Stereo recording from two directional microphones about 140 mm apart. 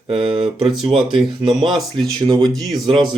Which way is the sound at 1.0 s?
35° right (ahead or behind).